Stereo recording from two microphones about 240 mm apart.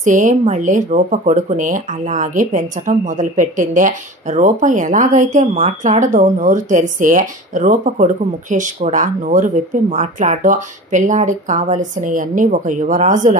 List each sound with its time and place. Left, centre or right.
0.0 s speech: right